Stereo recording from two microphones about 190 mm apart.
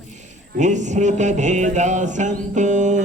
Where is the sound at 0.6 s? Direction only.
40° right (ahead or behind).